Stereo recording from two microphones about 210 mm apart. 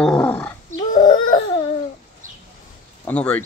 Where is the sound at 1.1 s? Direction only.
75° left (ahead or behind).